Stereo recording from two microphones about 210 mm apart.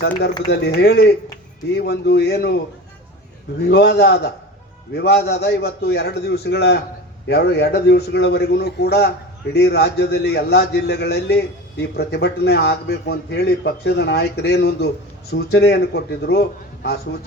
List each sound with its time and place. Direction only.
0.5 s speech: 50° left (ahead or behind)
3.7 s speech: 50° left (ahead or behind)